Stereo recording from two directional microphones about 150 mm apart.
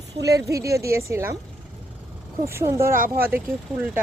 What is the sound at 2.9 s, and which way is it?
Speech, 70° right (ahead or behind).